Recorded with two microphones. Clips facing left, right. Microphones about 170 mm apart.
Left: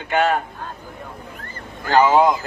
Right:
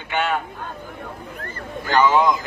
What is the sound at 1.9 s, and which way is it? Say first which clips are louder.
Speech: left 2 dB; 40° left (ahead or behind).